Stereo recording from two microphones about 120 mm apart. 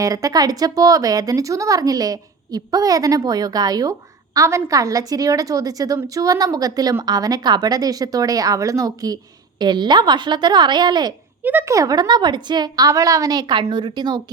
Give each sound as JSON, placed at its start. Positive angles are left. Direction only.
{"t": 0.0, "sound": "a woman's voice", "side_deg": -30}
{"t": 11.4, "sound": "a woman's voice", "side_deg": -20}